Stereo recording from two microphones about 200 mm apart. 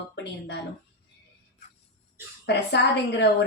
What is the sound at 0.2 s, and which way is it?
Speech, 55° left (ahead or behind).